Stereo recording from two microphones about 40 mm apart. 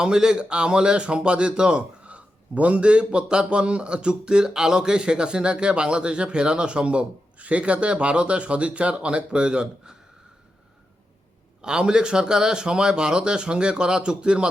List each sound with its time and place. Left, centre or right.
0.0 s a man's voice: centre
2.0 s a man's voice: right
11.6 s a man's voice: centre